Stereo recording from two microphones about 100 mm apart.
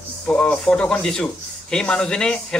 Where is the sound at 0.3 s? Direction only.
10° left (ahead or behind).